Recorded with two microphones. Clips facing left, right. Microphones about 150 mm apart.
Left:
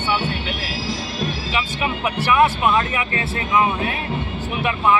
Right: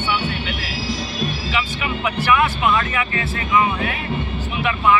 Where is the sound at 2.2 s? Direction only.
25° left (ahead or behind).